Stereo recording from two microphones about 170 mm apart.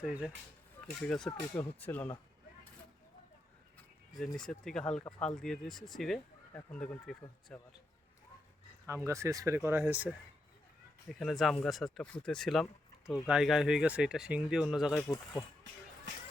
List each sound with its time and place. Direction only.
0.0 s speech: 5° right (ahead or behind)
1.0 s speech: 5° left (ahead or behind)
4.4 s speech: 5° left (ahead or behind)
8.9 s speech: 15° right (ahead or behind)
11.1 s speech: centre (ahead or behind)
15.0 s speech: 20° left (ahead or behind)